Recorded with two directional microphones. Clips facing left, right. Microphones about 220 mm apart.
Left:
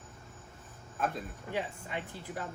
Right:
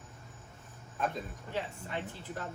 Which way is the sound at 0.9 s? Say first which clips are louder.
Even; centre (ahead or behind).